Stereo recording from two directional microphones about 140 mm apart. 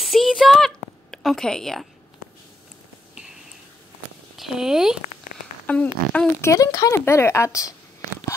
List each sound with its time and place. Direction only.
0.0 s a sound: centre (ahead or behind)
4.4 s speech: 5° right (ahead or behind)
5.7 s speech: 10° left (ahead or behind)
6.5 s a woman's voice: 25° left (ahead or behind)